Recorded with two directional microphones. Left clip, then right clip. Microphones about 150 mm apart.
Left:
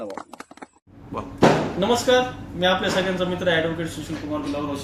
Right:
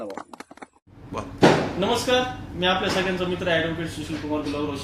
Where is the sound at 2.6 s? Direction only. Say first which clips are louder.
Left 2 dB; 10° left (ahead or behind).